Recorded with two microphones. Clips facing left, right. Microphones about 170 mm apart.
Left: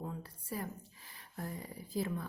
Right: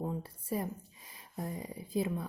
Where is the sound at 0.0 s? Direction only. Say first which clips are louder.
Right 6 dB; 20° right (ahead or behind).